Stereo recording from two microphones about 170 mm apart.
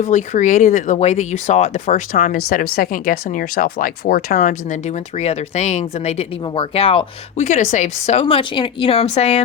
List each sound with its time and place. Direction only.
0.0 s speech: 45° left (ahead or behind)
6.4 s speech: 30° left (ahead or behind)